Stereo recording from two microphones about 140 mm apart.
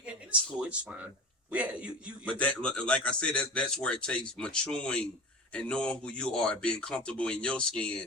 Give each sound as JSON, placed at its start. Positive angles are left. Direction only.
{"t": 0.0, "sound": "a man's voice", "side_deg": -10}
{"t": 2.4, "sound": "speech", "side_deg": 10}